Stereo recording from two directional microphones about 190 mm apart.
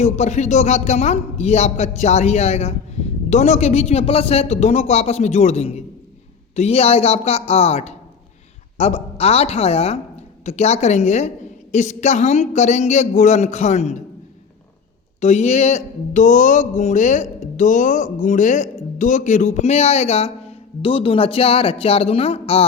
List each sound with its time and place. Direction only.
0.0 s speech: 35° left (ahead or behind)
15.2 s speech: 35° left (ahead or behind)